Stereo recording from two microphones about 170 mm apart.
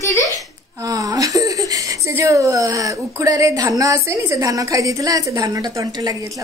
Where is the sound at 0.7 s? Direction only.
20° right (ahead or behind).